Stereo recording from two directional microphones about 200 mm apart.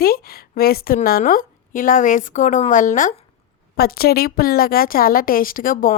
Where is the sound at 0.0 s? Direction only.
50° left (ahead or behind).